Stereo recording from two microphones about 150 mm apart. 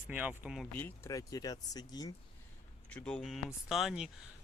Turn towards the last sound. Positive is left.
turn(degrees=-5)  # may be behind; listen again after turning